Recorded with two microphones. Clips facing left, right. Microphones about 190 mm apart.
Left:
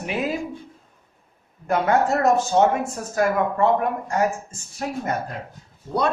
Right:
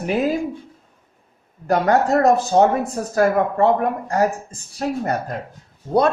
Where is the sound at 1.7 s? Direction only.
35° right (ahead or behind).